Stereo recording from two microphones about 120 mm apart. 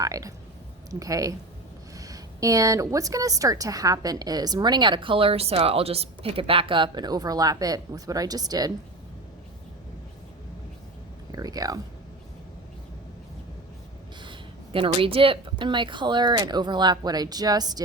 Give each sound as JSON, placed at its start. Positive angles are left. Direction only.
{"t": 0.0, "sound": "a woman's voice", "side_deg": -30}
{"t": 11.3, "sound": "speech", "side_deg": -30}
{"t": 14.2, "sound": "a woman's voice", "side_deg": -45}